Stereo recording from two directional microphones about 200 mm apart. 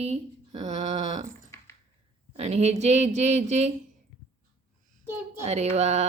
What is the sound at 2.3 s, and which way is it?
A woman's voice, 30° right (ahead or behind).